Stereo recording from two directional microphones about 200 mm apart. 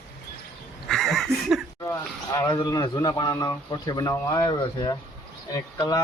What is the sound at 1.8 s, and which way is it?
Speech, 15° left (ahead or behind).